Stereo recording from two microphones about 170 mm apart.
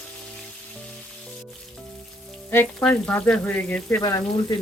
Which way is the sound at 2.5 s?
10° left (ahead or behind).